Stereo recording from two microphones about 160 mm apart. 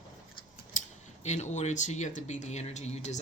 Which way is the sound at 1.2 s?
45° left (ahead or behind).